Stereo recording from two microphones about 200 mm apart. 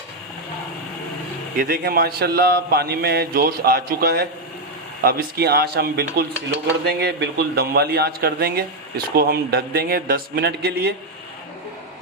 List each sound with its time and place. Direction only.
1.5 s a man's voice: 45° right (ahead or behind)